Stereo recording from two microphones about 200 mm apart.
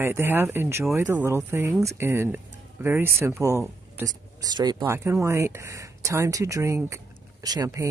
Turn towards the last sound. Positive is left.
turn(degrees=-15)  # may be behind; listen again after turning